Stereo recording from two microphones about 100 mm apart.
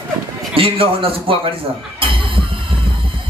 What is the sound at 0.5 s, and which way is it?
Speech, 65° right (ahead or behind).